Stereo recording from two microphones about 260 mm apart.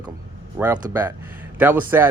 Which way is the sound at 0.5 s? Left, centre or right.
Centre.